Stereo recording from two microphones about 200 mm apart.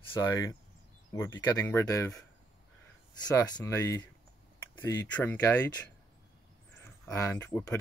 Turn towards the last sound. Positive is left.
turn(degrees=10)  # may be behind; listen again after turning